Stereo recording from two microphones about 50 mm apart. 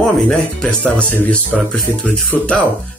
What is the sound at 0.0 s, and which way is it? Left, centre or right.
Speech, centre.